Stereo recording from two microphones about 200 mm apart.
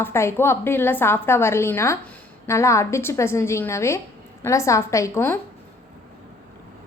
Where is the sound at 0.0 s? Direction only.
15° left (ahead or behind).